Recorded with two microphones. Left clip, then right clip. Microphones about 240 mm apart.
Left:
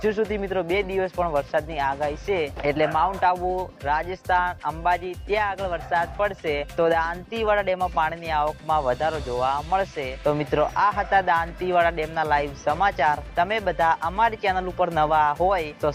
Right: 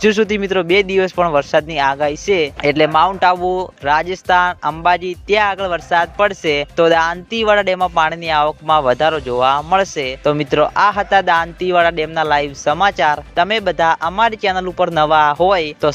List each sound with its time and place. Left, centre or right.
0.0 s speech: right